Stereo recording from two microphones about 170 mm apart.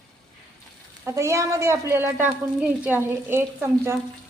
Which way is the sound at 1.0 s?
15° right (ahead or behind).